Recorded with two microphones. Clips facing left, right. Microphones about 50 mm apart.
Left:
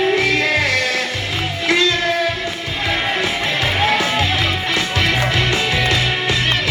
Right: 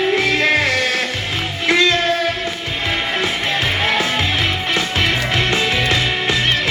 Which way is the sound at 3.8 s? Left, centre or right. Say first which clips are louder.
Left 3 dB; right.